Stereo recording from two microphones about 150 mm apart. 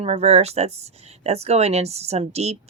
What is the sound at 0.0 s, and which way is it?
Speech, 45° right (ahead or behind).